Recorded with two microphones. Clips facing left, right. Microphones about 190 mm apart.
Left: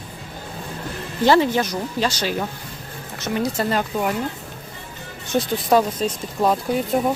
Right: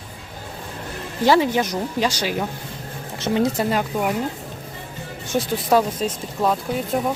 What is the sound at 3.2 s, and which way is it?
Speech, 25° right (ahead or behind).